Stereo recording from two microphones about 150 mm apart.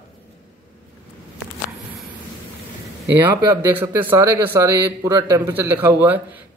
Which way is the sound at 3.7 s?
10° right (ahead or behind).